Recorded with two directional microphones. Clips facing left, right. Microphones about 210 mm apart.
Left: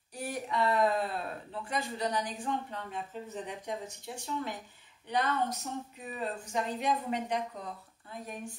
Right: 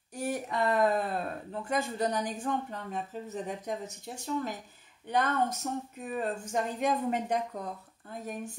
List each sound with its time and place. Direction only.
0.2 s speech: 45° right (ahead or behind)